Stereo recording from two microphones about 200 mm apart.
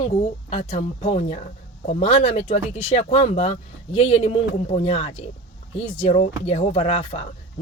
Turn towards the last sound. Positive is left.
turn(degrees=30)  # may be behind; listen again after turning